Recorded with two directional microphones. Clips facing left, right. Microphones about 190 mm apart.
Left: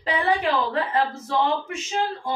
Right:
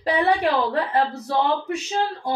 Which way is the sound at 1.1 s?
35° right (ahead or behind).